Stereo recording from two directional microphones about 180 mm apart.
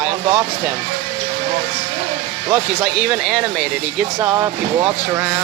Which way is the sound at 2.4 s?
15° right (ahead or behind).